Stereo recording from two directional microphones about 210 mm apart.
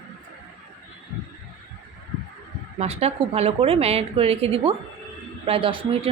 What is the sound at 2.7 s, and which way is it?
Speech, 30° right (ahead or behind).